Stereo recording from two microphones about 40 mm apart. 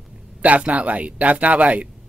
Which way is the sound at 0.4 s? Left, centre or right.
Right.